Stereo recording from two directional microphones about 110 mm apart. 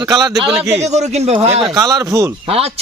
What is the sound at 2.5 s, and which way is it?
Speech, 65° right (ahead or behind).